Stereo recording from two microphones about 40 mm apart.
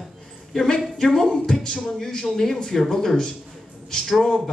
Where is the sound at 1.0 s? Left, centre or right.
Centre.